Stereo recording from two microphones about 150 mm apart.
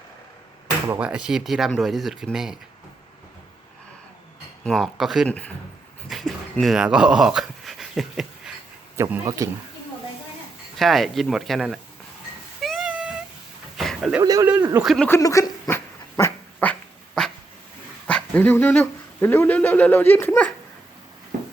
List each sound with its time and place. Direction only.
0.9 s speech: 5° right (ahead or behind)
4.6 s speech: centre (ahead or behind)
6.1 s dog: centre (ahead or behind)
9.0 s speech: 20° right (ahead or behind)
10.8 s speech: centre (ahead or behind)
12.6 s a sound: 5° right (ahead or behind)
14.2 s speech: 25° right (ahead or behind)
14.8 s speech: 5° left (ahead or behind)
15.1 s speech: 20° left (ahead or behind)
15.7 s dog: 20° left (ahead or behind)
18.1 s speech: 10° left (ahead or behind)